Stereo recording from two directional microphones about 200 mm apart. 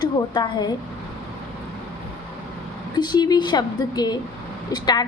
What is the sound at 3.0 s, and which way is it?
A child's voice, 20° left (ahead or behind).